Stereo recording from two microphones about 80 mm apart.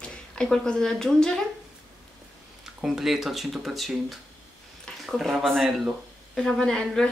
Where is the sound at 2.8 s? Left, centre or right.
Centre.